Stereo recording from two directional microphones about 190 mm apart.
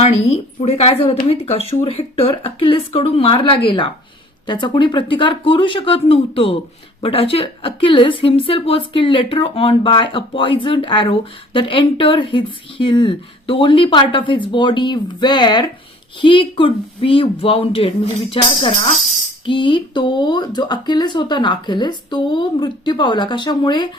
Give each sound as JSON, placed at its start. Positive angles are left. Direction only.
{"t": 0.0, "sound": "a woman's voice", "side_deg": 35}